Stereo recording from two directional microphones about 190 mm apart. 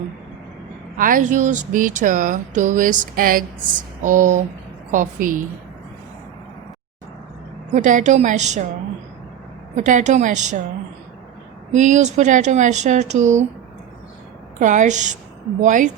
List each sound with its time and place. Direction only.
0.9 s speech: 45° right (ahead or behind)
7.7 s speech: 40° right (ahead or behind)
9.7 s speech: 40° right (ahead or behind)
11.7 s speech: 40° right (ahead or behind)
14.6 s speech: 40° right (ahead or behind)